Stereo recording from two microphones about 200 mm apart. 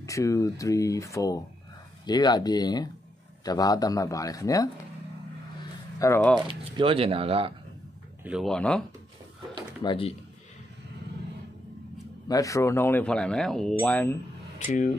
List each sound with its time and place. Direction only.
0.0 s speech: 15° left (ahead or behind)
5.9 s speech: 15° left (ahead or behind)
6.4 s speech: 25° right (ahead or behind)
8.2 s speech: 5° right (ahead or behind)
9.8 s speech: 25° left (ahead or behind)
12.3 s speech: 15° left (ahead or behind)